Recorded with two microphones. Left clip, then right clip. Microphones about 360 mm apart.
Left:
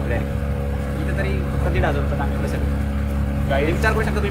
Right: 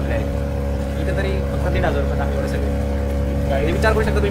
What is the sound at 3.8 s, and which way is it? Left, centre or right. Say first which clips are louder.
Speech: right 3 dB; centre.